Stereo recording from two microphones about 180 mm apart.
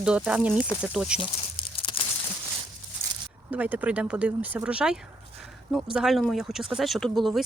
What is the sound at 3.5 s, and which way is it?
Speech, 10° right (ahead or behind).